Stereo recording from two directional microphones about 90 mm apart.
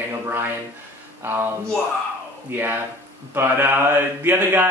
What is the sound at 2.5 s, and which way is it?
Speech, 20° right (ahead or behind).